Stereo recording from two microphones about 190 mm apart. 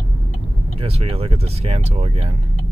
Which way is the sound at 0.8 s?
30° right (ahead or behind).